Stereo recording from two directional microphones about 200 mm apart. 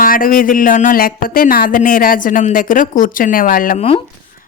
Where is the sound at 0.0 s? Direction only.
45° left (ahead or behind).